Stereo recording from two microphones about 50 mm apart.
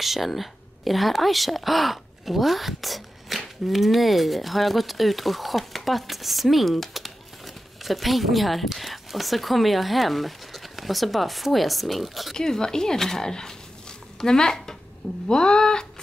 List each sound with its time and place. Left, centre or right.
0.0 s a woman's voice: centre
12.4 s speech: centre